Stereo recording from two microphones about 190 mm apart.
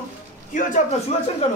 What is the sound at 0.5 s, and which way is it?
Speech, 40° left (ahead or behind).